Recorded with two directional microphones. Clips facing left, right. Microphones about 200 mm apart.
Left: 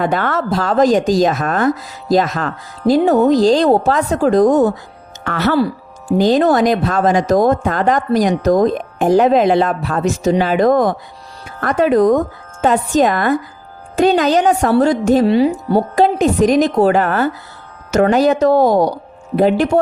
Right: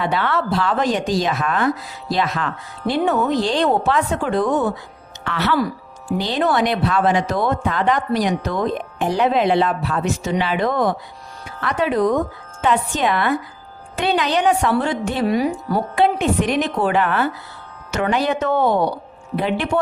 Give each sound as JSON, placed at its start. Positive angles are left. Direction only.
{"t": 0.0, "sound": "speech", "side_deg": 45}
{"t": 5.5, "sound": "a sound", "side_deg": 30}
{"t": 6.1, "sound": "speech", "side_deg": 45}
{"t": 15.3, "sound": "speech", "side_deg": 25}
{"t": 16.0, "sound": "speech", "side_deg": 40}